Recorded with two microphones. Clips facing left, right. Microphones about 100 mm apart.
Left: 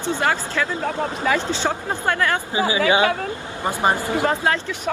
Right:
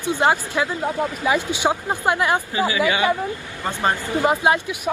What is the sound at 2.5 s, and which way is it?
Speech, 20° left (ahead or behind).